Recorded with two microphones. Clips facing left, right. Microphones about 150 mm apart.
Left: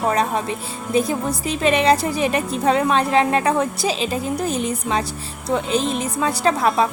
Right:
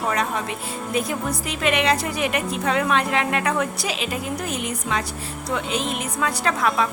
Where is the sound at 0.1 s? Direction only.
30° left (ahead or behind).